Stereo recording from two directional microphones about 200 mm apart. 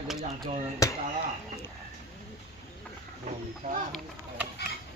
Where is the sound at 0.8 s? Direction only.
15° left (ahead or behind).